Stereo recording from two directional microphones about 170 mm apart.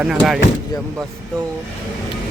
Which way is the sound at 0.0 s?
5° right (ahead or behind).